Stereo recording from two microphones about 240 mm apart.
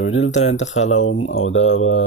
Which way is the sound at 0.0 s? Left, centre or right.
Left.